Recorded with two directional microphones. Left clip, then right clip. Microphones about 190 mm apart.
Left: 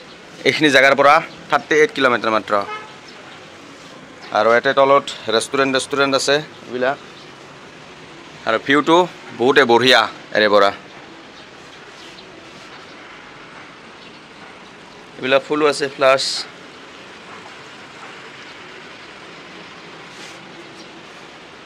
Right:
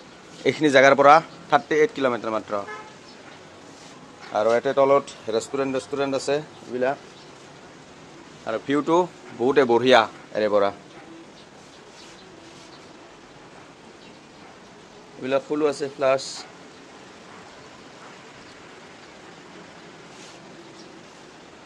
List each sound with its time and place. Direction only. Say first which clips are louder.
0.4 s speech: left 4 dB; 10° right (ahead or behind)
4.3 s speech: left 6 dB; 10° right (ahead or behind)
6.7 s speech: left 4 dB; 25° right (ahead or behind)
8.5 s speech: left 8 dB; centre (ahead or behind)
15.2 s speech: left 7 dB; 5° right (ahead or behind)